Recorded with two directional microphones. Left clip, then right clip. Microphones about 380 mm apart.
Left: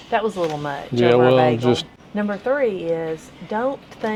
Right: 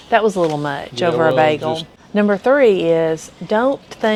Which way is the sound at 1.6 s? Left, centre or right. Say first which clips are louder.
Left 1 dB; left.